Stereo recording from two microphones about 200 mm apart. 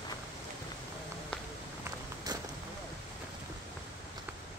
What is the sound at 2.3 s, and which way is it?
Vehicle, 20° right (ahead or behind).